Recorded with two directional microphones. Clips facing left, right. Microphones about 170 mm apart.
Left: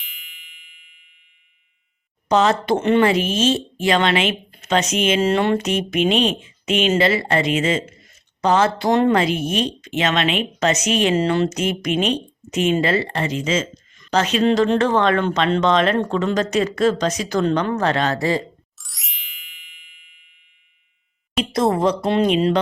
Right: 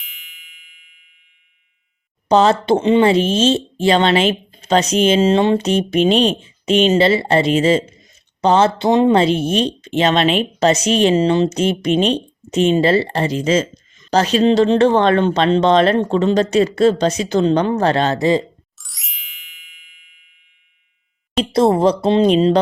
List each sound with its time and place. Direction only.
0.0 s music: centre (ahead or behind)
2.3 s a woman's voice: 30° right (ahead or behind)
5.2 s a woman's voice: 20° right (ahead or behind)
9.1 s a woman's voice: 30° right (ahead or behind)
11.1 s a woman's voice: 20° right (ahead or behind)
18.8 s ding: centre (ahead or behind)
21.5 s speech: 30° right (ahead or behind)